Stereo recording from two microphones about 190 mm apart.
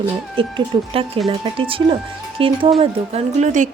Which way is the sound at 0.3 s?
30° right (ahead or behind).